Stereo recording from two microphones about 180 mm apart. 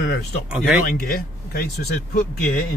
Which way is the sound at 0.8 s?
55° left (ahead or behind).